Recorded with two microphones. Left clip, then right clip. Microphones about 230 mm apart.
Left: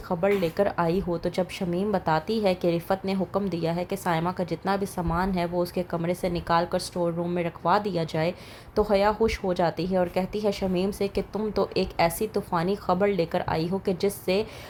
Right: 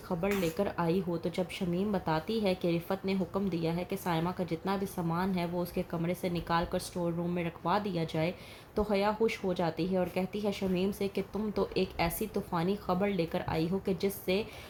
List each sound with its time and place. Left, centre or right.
0.1 s a woman's voice: left